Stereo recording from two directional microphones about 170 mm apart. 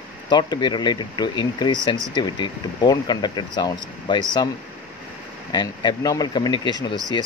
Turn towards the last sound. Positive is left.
turn(degrees=25)  # may be behind; listen again after turning